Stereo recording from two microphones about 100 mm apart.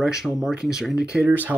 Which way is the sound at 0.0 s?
5° right (ahead or behind).